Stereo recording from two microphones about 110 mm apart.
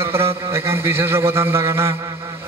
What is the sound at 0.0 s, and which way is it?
A man's voice, 25° right (ahead or behind).